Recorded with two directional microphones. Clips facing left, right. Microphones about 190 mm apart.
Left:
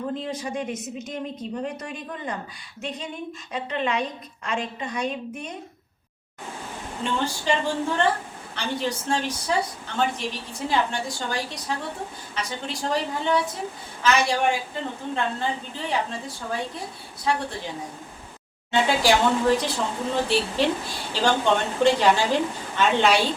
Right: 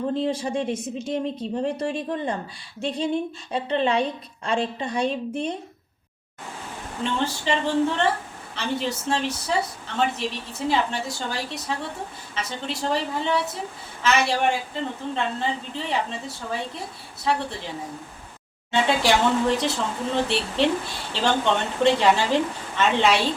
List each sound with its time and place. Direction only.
0.3 s a woman's voice: 30° right (ahead or behind)
7.0 s speech: centre (ahead or behind)